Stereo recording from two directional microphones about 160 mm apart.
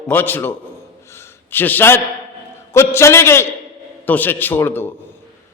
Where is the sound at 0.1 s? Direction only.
10° left (ahead or behind).